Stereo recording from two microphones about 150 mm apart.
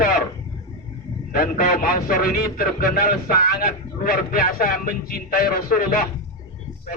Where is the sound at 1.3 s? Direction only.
75° left (ahead or behind).